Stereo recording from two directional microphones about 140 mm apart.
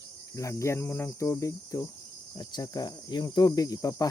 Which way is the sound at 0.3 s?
20° left (ahead or behind).